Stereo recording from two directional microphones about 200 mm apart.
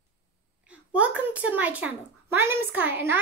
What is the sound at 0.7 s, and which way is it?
A child's voice, 5° right (ahead or behind).